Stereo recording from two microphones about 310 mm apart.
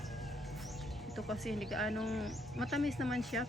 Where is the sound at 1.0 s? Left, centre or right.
Centre.